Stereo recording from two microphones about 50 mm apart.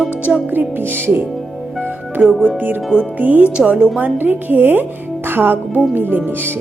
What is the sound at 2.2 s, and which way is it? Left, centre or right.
A woman's voice, right.